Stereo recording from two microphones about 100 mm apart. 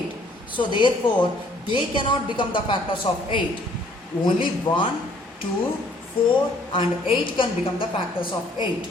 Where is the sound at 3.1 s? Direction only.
80° left.